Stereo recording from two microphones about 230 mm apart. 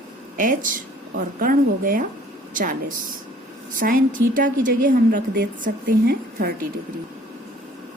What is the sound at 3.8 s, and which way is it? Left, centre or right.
A woman's voice, right.